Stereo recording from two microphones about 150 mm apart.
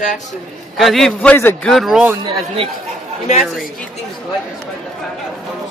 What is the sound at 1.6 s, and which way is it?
Speech, centre (ahead or behind).